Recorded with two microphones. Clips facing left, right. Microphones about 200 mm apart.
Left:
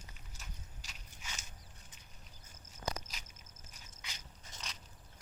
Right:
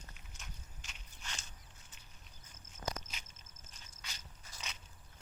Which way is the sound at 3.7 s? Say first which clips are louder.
Even; 15° left (ahead or behind).